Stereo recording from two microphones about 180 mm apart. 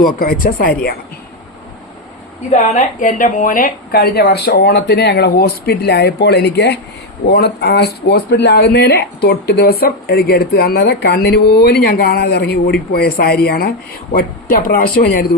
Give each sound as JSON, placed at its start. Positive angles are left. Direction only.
{"t": 0.0, "sound": "speech", "side_deg": 50}
{"t": 2.5, "sound": "speech", "side_deg": 45}